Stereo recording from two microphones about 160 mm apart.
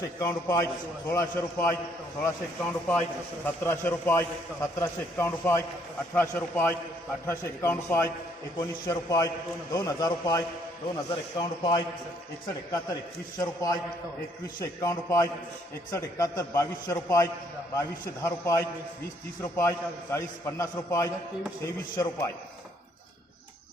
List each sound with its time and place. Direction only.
0.2 s a man's voice: 15° left (ahead or behind)
13.4 s a man's voice: 20° left (ahead or behind)